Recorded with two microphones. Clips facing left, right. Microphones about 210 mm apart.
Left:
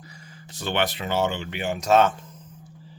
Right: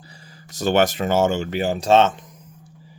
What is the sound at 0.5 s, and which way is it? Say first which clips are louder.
Speech: right 8 dB; 45° right (ahead or behind).